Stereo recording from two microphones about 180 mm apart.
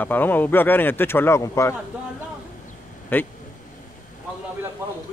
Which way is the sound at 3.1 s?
10° left (ahead or behind).